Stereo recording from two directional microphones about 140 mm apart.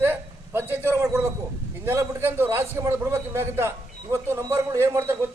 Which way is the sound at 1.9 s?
15° right (ahead or behind).